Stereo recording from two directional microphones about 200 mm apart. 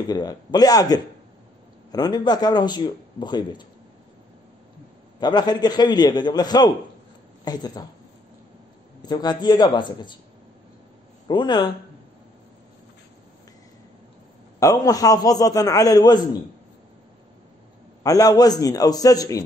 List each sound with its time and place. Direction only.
0.1 s a man's voice: 20° left (ahead or behind)
5.2 s a man's voice: 20° left (ahead or behind)
9.0 s a man's voice: 20° left (ahead or behind)
11.2 s a man's voice: 20° left (ahead or behind)
14.6 s a man's voice: 15° left (ahead or behind)
18.0 s a man's voice: 20° left (ahead or behind)